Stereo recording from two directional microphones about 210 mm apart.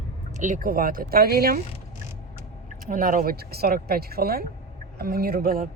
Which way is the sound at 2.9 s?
40° right (ahead or behind).